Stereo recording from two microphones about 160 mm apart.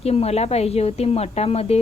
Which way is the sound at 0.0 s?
40° left (ahead or behind).